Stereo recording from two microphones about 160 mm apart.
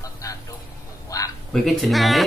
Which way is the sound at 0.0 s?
20° left (ahead or behind).